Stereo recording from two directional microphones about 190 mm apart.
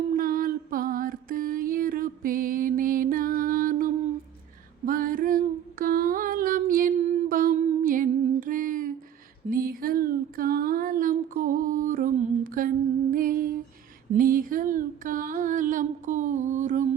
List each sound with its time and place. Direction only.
0.2 s music: 45° right (ahead or behind)
4.9 s female singing: 45° right (ahead or behind)
5.8 s a sound: 50° right (ahead or behind)